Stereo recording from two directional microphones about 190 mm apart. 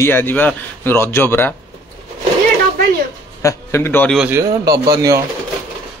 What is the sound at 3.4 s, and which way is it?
Speech, 15° left (ahead or behind).